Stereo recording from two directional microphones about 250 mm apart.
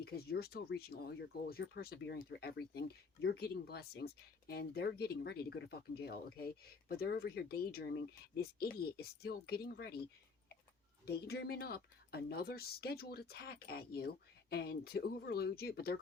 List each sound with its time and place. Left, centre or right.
0.0 s speech: left
11.0 s speech: left